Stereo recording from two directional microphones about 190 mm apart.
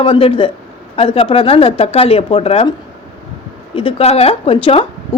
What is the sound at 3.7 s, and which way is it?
A man's voice, 30° left (ahead or behind).